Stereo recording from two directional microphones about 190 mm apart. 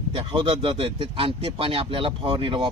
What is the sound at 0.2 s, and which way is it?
Speech, 25° right (ahead or behind).